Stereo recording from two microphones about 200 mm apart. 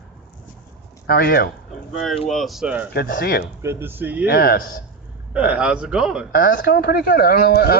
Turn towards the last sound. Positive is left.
turn(degrees=50)  # may be behind; listen again after turning